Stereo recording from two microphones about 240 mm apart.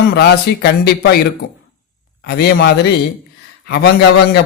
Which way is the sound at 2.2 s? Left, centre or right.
Left.